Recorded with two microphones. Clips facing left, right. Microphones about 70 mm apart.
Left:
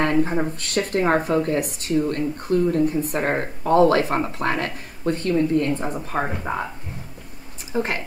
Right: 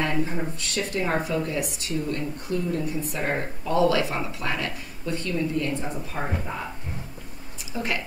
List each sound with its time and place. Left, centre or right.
0.0 s a woman's voice: left
7.7 s speech: left